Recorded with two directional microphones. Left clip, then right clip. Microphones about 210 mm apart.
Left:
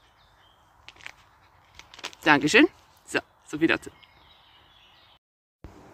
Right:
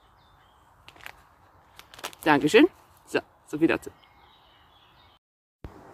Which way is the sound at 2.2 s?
5° left (ahead or behind).